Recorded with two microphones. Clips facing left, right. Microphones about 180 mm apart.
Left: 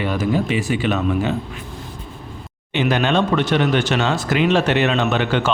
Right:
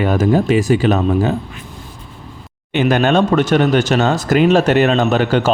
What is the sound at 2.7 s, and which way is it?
Speech, 50° right (ahead or behind).